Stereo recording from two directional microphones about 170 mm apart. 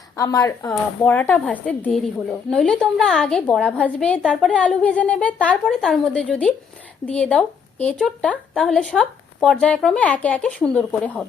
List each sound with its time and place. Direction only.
0.2 s speech: 20° left (ahead or behind)
0.7 s speech: 10° left (ahead or behind)